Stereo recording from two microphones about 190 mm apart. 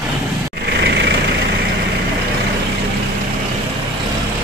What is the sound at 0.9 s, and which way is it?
Vehicle, 65° right (ahead or behind).